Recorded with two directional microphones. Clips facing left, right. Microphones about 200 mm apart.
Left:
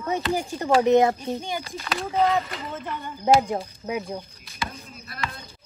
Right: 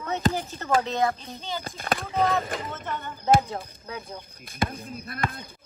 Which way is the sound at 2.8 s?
10° left (ahead or behind).